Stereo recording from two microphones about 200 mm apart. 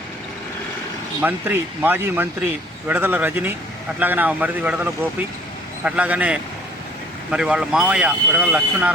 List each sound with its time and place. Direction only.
1.2 s speech: 10° right (ahead or behind)